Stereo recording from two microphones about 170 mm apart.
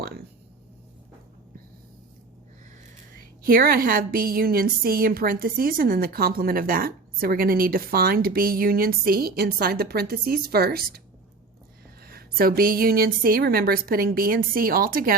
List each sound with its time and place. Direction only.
0.0 s a sound: 65° right (ahead or behind)
3.2 s a woman's voice: 60° right (ahead or behind)
12.0 s a woman's voice: 60° right (ahead or behind)